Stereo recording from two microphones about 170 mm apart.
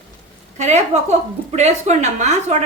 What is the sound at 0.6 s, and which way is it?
A woman's voice, 45° right (ahead or behind).